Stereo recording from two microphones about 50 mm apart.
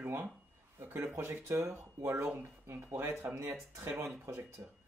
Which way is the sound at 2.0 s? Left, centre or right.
Right.